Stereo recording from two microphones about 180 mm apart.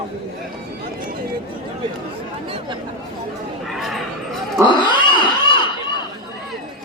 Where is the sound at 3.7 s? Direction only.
Centre (ahead or behind).